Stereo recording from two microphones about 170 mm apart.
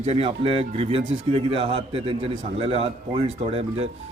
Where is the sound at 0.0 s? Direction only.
35° right (ahead or behind).